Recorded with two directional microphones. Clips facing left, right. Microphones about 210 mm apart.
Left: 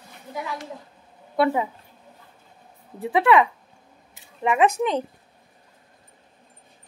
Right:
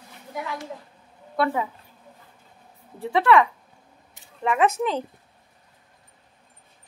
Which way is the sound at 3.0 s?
15° left (ahead or behind).